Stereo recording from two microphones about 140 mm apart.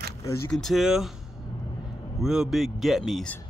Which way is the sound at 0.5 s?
5° left (ahead or behind).